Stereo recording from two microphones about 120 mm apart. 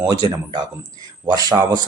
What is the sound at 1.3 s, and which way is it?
Speech, 30° right (ahead or behind).